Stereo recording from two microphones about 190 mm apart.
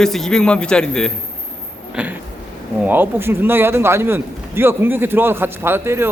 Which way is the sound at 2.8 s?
10° right (ahead or behind).